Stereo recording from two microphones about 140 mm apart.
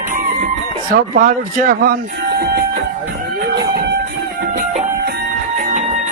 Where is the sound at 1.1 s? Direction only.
65° right (ahead or behind); by 2.8 s 90° right.